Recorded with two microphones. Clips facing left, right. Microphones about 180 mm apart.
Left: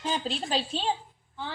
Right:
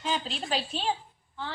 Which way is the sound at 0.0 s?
40° left (ahead or behind).